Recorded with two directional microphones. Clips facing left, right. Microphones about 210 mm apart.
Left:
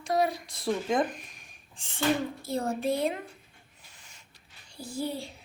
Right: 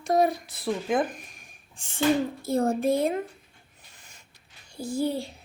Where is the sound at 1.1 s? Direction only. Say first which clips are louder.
Right 1 dB; 50° right (ahead or behind).